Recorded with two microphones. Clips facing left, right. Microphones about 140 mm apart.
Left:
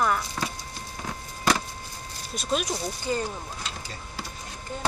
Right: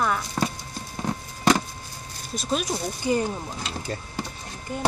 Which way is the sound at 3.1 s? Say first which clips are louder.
Right 5 dB; 15° right (ahead or behind).